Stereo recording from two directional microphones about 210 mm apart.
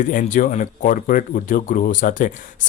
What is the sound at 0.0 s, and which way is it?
Speech, 40° left (ahead or behind).